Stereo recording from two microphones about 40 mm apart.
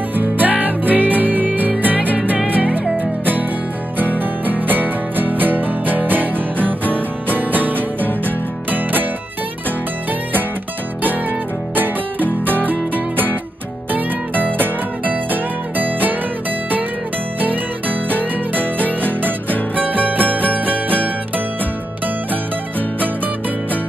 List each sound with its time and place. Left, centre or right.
0.1 s music: right
11.0 s music: right
14.6 s music: right
17.4 s music: right
19.7 s music: right